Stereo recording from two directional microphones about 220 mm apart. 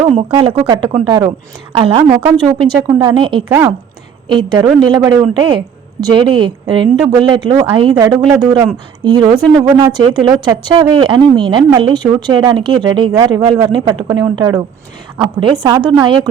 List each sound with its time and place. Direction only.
0.0 s a woman's voice: 25° right (ahead or behind)
3.5 s a woman's voice: 10° right (ahead or behind)